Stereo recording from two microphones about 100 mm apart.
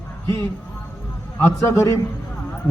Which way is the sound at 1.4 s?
30° left (ahead or behind).